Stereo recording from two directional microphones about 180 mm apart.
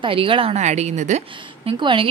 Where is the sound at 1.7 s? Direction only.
30° right (ahead or behind).